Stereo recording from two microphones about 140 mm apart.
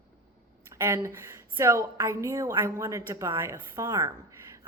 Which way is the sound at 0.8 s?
20° right (ahead or behind).